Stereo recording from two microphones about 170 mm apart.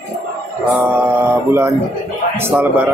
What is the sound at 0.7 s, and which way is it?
Mantra, 10° right (ahead or behind).